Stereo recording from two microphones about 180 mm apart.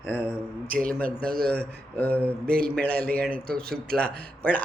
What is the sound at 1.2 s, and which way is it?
Speech, 55° right (ahead or behind).